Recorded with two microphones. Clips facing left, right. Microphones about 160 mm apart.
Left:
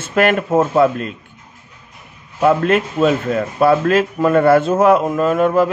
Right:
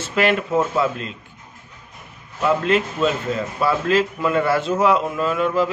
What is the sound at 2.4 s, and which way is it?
Speech, 50° left (ahead or behind).